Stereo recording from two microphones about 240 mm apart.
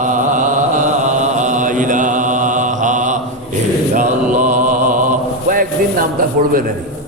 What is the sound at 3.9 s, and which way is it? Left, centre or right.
Mantra, right.